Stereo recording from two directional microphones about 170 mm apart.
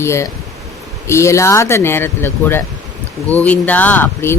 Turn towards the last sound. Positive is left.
turn(degrees=15)  # may be behind; listen again after turning